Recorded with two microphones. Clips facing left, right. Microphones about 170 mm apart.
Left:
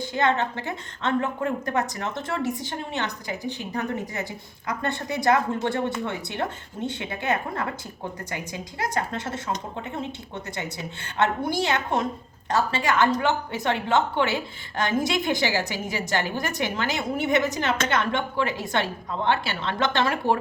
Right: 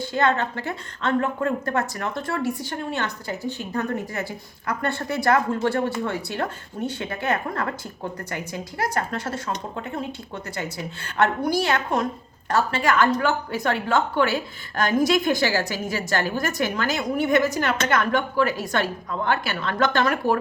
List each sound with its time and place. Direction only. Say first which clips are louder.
0.0 s a woman's voice: right 1 dB; 20° left (ahead or behind)
10.6 s a woman's voice: right 2 dB; 20° left (ahead or behind)